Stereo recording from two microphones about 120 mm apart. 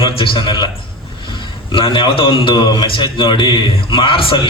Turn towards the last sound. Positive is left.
turn(degrees=45)  # may be behind; listen again after turning